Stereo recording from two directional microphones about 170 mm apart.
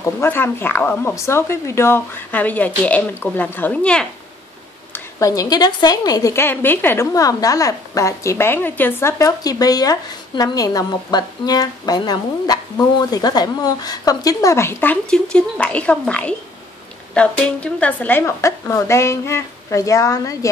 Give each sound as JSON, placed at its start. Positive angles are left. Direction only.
{"t": 0.0, "sound": "speech", "side_deg": 15}
{"t": 4.9, "sound": "a woman's voice", "side_deg": 20}